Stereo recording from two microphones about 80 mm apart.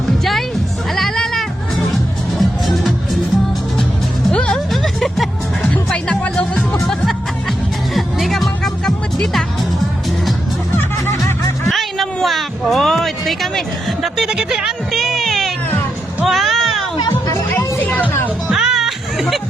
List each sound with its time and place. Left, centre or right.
0.9 s sheep: centre
2.4 s music: centre
4.3 s music: centre
10.8 s music: left
11.7 s a sound: centre
16.2 s music: centre
18.4 s music: centre